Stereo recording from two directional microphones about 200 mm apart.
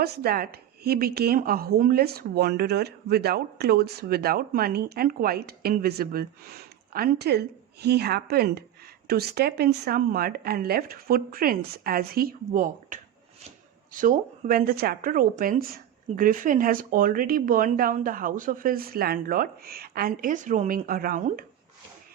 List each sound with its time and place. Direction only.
0.0 s speech: 50° right (ahead or behind)